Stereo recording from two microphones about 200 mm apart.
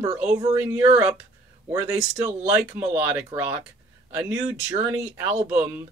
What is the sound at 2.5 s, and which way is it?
Speech, 10° right (ahead or behind).